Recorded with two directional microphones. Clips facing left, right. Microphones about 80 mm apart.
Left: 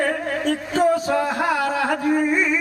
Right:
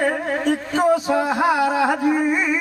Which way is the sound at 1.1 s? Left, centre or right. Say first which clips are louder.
Right 2 dB; centre.